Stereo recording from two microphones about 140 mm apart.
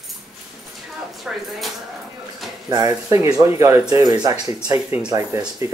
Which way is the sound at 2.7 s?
25° right (ahead or behind).